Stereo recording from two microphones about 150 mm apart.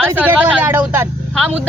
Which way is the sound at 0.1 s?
10° right (ahead or behind).